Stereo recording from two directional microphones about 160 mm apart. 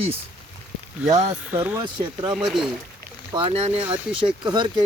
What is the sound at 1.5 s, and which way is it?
Speech, 15° right (ahead or behind).